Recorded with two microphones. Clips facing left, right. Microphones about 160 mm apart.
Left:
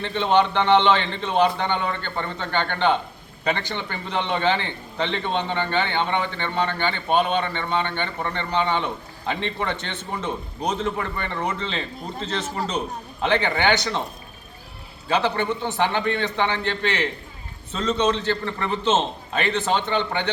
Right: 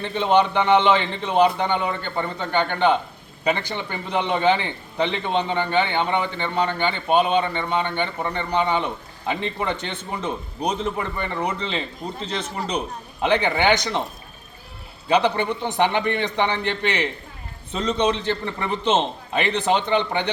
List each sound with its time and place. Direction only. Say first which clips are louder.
0.0 s a man's voice: right 1 dB; 10° right (ahead or behind)
15.1 s a man's voice: right 2 dB; 15° right (ahead or behind)